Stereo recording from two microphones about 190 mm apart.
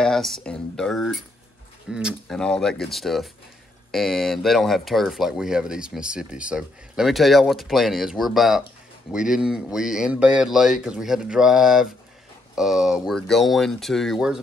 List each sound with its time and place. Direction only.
0.0 s speech: centre (ahead or behind)